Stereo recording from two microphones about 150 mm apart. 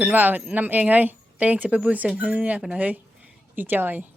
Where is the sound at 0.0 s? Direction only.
10° right (ahead or behind).